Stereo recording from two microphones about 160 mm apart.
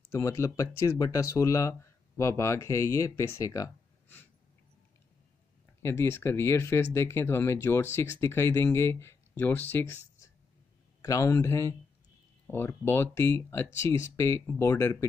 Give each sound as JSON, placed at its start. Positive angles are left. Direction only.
{"t": 0.1, "sound": "speech", "side_deg": 20}
{"t": 5.8, "sound": "speech", "side_deg": 15}